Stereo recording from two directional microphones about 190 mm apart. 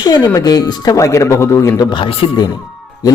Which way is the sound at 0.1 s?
20° left (ahead or behind).